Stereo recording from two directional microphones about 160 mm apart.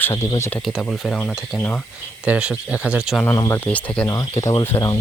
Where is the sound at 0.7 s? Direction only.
Centre (ahead or behind).